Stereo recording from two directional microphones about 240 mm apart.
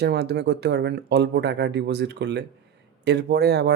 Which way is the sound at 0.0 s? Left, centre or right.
Right.